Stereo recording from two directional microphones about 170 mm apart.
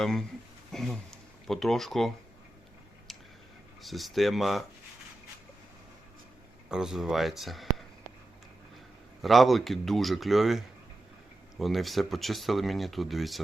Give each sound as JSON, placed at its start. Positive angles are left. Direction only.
{"t": 0.0, "sound": "speech", "side_deg": 0}
{"t": 3.1, "sound": "tick", "side_deg": 0}
{"t": 3.8, "sound": "speech", "side_deg": 0}
{"t": 6.7, "sound": "speech", "side_deg": -5}
{"t": 9.2, "sound": "speech", "side_deg": 0}
{"t": 11.6, "sound": "speech", "side_deg": 0}